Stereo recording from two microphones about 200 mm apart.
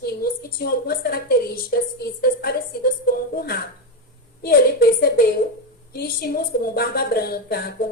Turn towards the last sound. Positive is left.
turn(degrees=50)  # may be behind; listen again after turning